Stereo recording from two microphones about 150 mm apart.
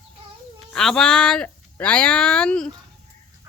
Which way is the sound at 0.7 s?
5° left (ahead or behind).